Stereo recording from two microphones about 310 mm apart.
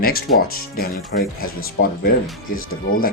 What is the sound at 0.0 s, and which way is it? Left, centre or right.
Speech, left.